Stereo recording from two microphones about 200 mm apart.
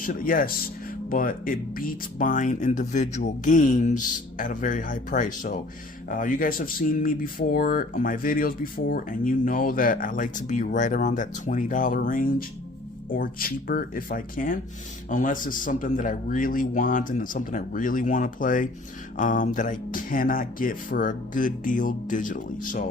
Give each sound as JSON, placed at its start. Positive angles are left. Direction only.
{"t": 0.0, "sound": "speech", "side_deg": 45}